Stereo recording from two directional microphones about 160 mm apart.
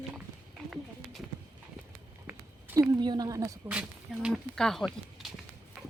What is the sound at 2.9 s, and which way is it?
Speech, 25° right (ahead or behind).